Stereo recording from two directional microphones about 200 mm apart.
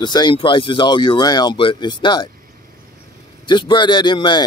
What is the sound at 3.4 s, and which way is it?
Speech, 25° left (ahead or behind).